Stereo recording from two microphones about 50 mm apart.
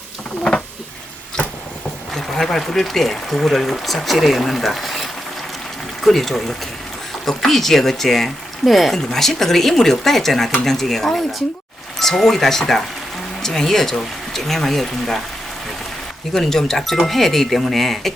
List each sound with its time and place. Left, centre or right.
2.1 s speech: centre
16.3 s speech: centre